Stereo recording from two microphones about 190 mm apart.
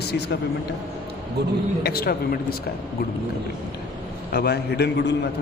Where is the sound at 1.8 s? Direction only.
55° left (ahead or behind).